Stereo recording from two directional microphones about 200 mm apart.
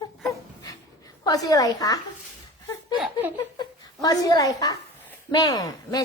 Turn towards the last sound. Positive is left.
turn(degrees=20)  # may be behind; listen again after turning